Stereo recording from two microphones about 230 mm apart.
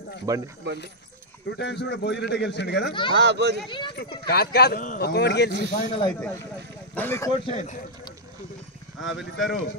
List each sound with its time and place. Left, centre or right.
0.3 s speech: centre
0.7 s speech: right
1.6 s speech: left
2.9 s speech: left
3.2 s speech: right
3.6 s speech: left
4.3 s speech: left
5.8 s speech: left
7.0 s speech: centre; by 7.8 s left
9.1 s speech: centre